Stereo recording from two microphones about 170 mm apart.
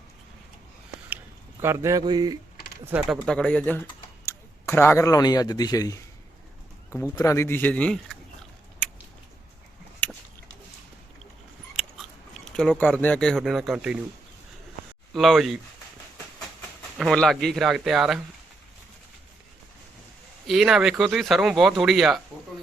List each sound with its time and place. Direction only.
1.6 s speech: 15° right (ahead or behind)
2.8 s speech: 10° right (ahead or behind)
3.2 s speech: 5° left (ahead or behind)
10.0 s a sound: 10° left (ahead or behind)
12.3 s speech: 5° left (ahead or behind)
15.1 s speech: centre (ahead or behind)
17.0 s speech: centre (ahead or behind)
20.5 s speech: centre (ahead or behind)